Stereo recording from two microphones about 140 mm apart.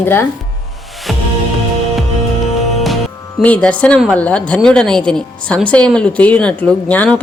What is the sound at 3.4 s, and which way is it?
Speech, 10° left (ahead or behind).